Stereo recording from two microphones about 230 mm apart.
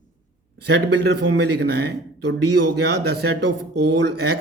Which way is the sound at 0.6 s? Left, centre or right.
Right.